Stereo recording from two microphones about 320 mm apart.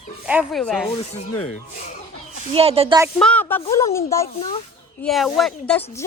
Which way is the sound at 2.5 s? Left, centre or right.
Centre.